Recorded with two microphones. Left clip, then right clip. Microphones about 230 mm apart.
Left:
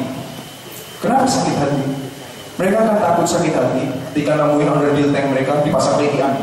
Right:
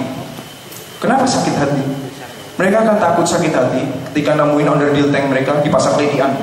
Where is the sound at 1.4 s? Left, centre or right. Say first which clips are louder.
Right 2 dB; centre.